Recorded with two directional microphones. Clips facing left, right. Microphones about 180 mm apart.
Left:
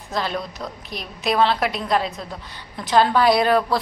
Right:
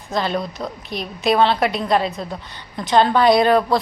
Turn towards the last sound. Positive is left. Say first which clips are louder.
# right 3 dB
turn(degrees=5)  # may be behind; listen again after turning